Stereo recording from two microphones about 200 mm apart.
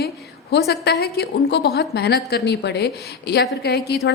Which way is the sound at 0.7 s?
55° left (ahead or behind).